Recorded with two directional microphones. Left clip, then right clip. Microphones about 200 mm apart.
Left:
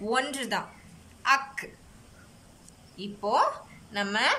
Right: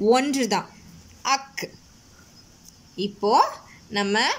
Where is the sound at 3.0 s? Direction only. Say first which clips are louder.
Right 6 dB; 25° right (ahead or behind).